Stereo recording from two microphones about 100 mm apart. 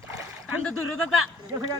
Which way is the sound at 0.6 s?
10° left (ahead or behind).